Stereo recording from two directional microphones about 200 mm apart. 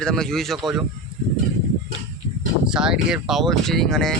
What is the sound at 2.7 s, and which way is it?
Speech, 5° right (ahead or behind).